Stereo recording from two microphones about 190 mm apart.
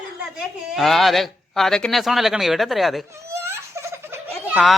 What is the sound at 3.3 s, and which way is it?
Giggle, 15° right (ahead or behind).